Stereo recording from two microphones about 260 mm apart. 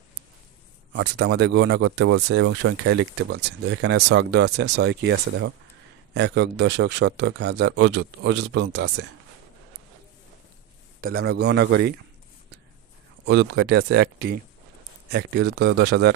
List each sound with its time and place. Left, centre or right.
0.9 s speech: right
11.0 s speech: right
13.2 s speech: right